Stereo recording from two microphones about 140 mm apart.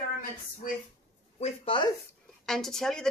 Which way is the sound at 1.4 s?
50° left (ahead or behind).